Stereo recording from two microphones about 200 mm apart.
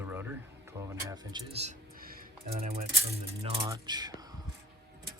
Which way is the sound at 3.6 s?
20° right (ahead or behind).